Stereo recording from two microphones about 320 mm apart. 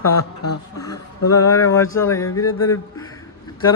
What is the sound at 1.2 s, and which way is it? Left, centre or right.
Speech, left.